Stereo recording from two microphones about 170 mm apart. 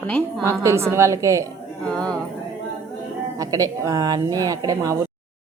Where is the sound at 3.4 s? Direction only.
20° right (ahead or behind).